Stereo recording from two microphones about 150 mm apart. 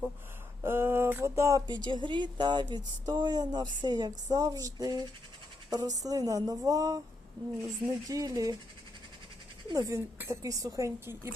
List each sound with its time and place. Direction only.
0.6 s speech: 15° right (ahead or behind)
9.6 s speech: 20° right (ahead or behind)